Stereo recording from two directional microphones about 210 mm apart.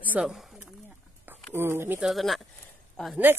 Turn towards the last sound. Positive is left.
turn(degrees=-5)  # may be behind; listen again after turning